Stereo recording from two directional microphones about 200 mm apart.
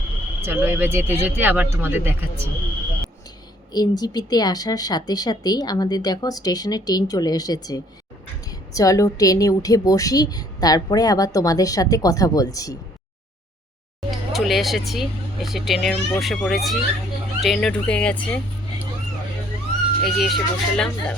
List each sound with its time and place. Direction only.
0.4 s speech: 10° right (ahead or behind)
3.7 s a woman's voice: 20° left (ahead or behind)
14.1 s speech: centre (ahead or behind)
20.1 s speech: centre (ahead or behind)